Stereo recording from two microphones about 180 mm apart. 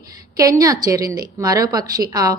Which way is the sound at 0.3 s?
20° right (ahead or behind).